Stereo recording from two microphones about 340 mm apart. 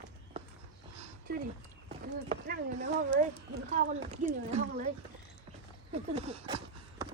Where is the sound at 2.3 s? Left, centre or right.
Right.